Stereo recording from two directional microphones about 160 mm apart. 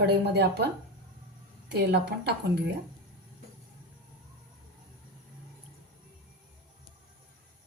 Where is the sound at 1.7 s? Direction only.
90° right.